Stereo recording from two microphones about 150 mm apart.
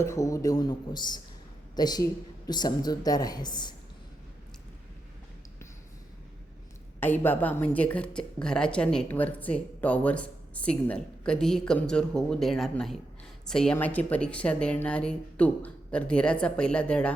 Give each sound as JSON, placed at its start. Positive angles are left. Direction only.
{"t": 0.0, "sound": "a woman's voice", "side_deg": 20}
{"t": 7.0, "sound": "a woman's voice", "side_deg": 15}